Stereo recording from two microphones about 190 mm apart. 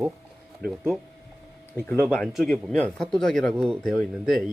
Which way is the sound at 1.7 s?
10° left (ahead or behind).